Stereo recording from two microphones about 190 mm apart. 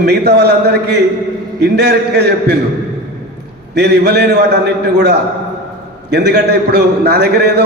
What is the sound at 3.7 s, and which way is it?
Speech, 60° right (ahead or behind).